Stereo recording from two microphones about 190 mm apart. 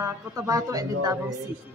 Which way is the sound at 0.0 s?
20° right (ahead or behind).